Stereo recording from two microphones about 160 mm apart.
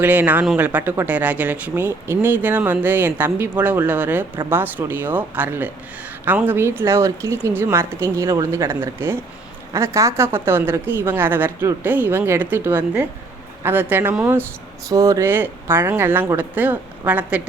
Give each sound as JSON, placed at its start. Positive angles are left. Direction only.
{"t": 0.0, "sound": "a man's voice", "side_deg": -10}